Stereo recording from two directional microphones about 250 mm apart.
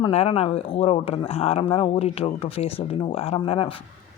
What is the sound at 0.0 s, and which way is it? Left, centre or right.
Speech, left.